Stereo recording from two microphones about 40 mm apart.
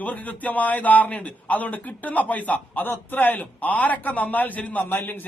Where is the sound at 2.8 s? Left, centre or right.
Left.